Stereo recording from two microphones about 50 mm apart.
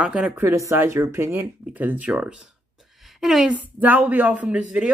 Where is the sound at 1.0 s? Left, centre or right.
Right.